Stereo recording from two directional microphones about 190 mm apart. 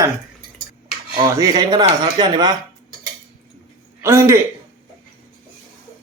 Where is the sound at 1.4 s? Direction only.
20° right (ahead or behind).